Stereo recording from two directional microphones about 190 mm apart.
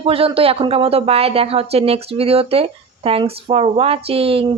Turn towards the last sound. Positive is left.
turn(degrees=-30)  # may be behind; listen again after turning